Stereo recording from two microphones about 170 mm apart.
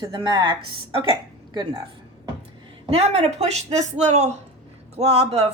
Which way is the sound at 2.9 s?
35° right (ahead or behind).